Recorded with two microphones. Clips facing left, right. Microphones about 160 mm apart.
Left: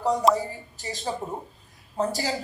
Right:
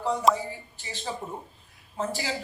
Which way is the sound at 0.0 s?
40° left (ahead or behind).